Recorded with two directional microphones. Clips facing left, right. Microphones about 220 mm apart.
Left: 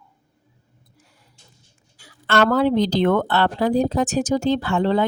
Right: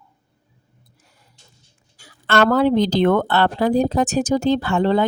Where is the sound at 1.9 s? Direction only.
50° right (ahead or behind).